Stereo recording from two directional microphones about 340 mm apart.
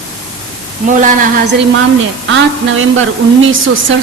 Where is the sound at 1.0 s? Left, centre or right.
Right.